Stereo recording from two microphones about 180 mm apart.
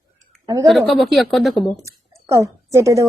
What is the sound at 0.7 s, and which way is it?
A woman's voice, centre (ahead or behind).